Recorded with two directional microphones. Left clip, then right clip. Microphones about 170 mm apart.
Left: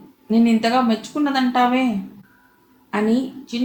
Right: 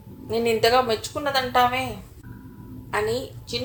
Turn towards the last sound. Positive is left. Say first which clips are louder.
# left 4 dB
turn(degrees=-40)  # may be behind; listen again after turning